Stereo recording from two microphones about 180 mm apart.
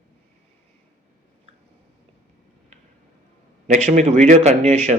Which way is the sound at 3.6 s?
45° right (ahead or behind).